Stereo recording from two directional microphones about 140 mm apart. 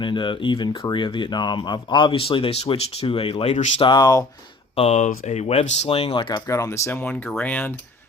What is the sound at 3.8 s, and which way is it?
Speech, 30° left (ahead or behind).